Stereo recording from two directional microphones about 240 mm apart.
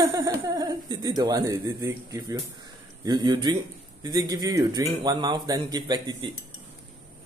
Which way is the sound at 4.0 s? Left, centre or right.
Centre.